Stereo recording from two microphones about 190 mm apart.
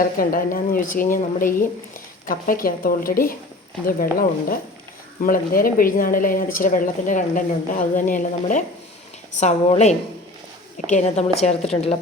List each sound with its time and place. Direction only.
0.0 s a woman's voice: 50° left (ahead or behind); by 11.9 s 30° left (ahead or behind)